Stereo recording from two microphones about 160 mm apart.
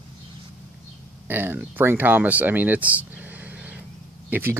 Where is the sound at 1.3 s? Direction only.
10° right (ahead or behind).